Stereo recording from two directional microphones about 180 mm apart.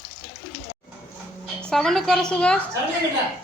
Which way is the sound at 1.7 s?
Centre (ahead or behind).